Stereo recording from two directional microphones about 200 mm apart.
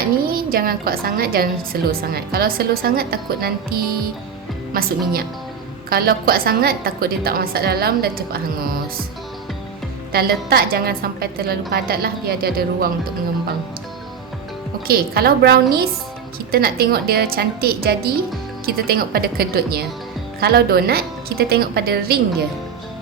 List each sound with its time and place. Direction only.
0.3 s a woman's voice: 45° right (ahead or behind)
10.1 s a woman's voice: 50° right (ahead or behind)
14.8 s a woman's voice: 50° right (ahead or behind)